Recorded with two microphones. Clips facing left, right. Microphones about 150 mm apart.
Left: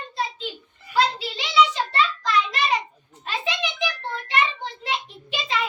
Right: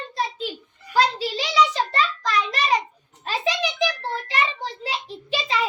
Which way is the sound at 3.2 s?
35° right (ahead or behind).